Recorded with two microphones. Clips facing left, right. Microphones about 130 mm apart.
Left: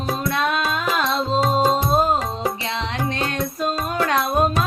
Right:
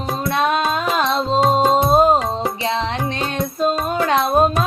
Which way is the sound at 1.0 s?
25° right (ahead or behind).